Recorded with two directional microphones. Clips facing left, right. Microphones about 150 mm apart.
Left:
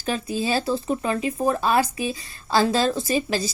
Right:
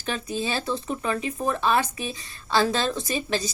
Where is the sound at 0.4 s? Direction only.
35° left (ahead or behind).